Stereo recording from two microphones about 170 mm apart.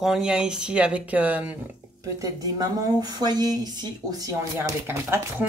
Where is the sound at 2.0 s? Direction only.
20° right (ahead or behind).